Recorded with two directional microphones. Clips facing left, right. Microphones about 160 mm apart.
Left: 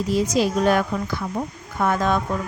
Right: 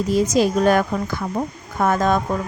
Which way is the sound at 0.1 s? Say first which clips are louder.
Right 3 dB; 45° right (ahead or behind).